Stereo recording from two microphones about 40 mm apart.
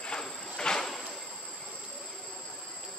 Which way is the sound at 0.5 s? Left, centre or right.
Centre.